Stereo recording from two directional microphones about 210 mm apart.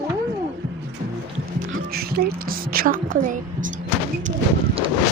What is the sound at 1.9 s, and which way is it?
A woman's voice, 45° right (ahead or behind).